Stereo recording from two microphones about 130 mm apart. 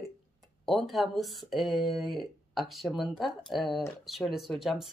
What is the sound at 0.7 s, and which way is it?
Speech, centre (ahead or behind).